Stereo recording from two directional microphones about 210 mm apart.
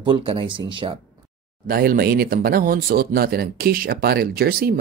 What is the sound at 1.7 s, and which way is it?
Speech, 45° right (ahead or behind).